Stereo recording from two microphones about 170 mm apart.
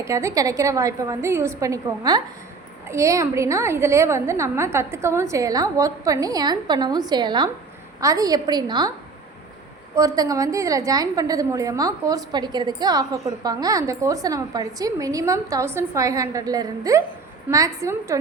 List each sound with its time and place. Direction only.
0.0 s a woman's voice: 15° right (ahead or behind)
9.9 s a woman's voice: 20° right (ahead or behind)